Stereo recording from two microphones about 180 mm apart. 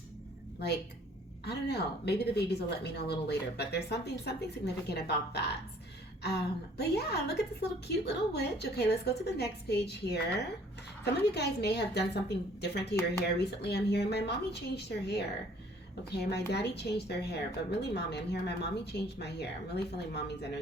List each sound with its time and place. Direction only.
1.5 s a woman's voice: 65° left (ahead or behind)